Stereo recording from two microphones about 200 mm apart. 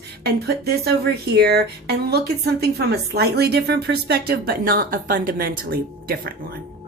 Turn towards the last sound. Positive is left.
turn(degrees=-45)  # may be behind; listen again after turning